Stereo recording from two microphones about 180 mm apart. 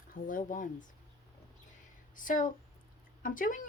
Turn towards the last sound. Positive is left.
turn(degrees=50)  # may be behind; listen again after turning